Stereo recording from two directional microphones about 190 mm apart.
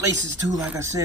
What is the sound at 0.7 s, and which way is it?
Speech, 15° right (ahead or behind).